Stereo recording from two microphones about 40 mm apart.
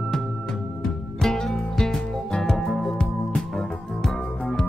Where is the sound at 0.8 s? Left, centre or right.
Centre.